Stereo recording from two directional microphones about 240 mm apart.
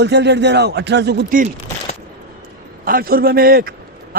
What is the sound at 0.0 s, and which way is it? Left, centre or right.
Speech, right.